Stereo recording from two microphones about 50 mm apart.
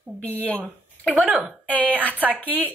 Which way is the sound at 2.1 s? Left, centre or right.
Right.